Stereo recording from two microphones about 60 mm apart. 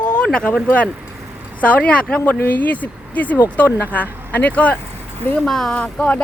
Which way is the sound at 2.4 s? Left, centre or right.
Left.